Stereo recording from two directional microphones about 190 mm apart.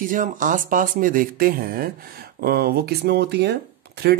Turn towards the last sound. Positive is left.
turn(degrees=-60)  # may be behind; listen again after turning